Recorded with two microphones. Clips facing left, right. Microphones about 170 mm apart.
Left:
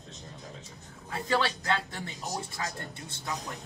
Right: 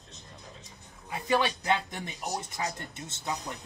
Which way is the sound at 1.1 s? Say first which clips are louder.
Right 1 dB; 15° right (ahead or behind).